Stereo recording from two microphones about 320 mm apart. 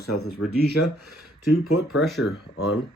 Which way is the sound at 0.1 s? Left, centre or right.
Left.